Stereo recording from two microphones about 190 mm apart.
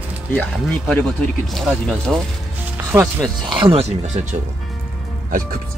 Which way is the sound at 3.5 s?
25° right (ahead or behind).